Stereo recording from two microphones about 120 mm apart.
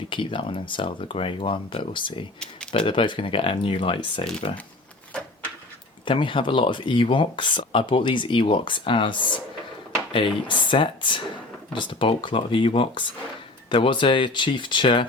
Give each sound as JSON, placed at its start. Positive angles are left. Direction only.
{"t": 0.1, "sound": "speech", "side_deg": 45}
{"t": 6.1, "sound": "speech", "side_deg": 45}